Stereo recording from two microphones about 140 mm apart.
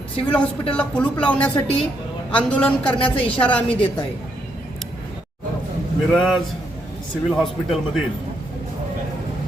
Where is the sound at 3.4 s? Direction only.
10° left (ahead or behind).